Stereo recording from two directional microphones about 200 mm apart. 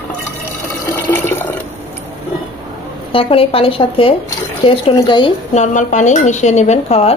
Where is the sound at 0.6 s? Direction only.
10° left (ahead or behind).